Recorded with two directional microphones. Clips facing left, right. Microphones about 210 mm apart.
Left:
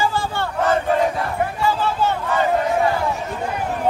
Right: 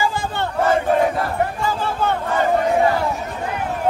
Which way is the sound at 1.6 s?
55° right (ahead or behind).